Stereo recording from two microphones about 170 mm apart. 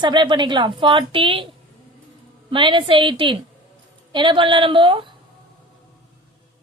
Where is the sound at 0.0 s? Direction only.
25° right (ahead or behind).